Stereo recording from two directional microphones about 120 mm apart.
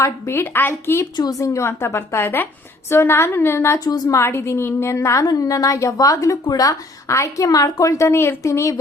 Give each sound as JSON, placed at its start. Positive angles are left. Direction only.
{"t": 0.0, "sound": "a woman's voice", "side_deg": 20}
{"t": 1.1, "sound": "a woman's voice", "side_deg": 30}
{"t": 3.8, "sound": "a woman's voice", "side_deg": 35}
{"t": 4.2, "sound": "a woman's voice", "side_deg": 20}